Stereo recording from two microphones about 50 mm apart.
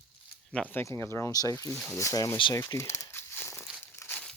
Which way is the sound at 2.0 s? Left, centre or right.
Left.